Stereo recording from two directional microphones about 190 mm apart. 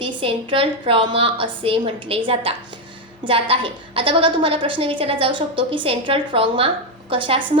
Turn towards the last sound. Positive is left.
turn(degrees=-25)  # may be behind; listen again after turning